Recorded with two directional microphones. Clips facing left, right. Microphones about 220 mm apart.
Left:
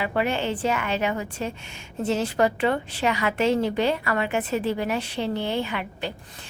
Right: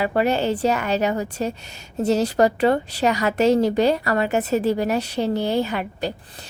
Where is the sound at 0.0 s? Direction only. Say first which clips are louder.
Right 5 dB; 40° right (ahead or behind).